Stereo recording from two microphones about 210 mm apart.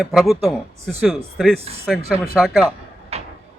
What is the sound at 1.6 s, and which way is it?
Speech, 30° right (ahead or behind).